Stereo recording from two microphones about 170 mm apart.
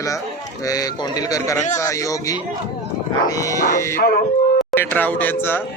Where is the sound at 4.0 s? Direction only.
60° left (ahead or behind).